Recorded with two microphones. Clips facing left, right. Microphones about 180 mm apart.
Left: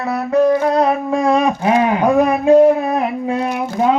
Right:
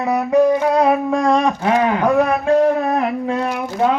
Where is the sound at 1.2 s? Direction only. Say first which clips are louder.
Left 2 dB; 10° left (ahead or behind).